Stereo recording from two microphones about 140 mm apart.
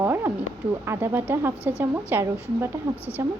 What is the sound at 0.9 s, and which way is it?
Speech, 15° right (ahead or behind).